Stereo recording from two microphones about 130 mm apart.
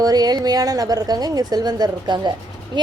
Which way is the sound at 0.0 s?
30° right (ahead or behind).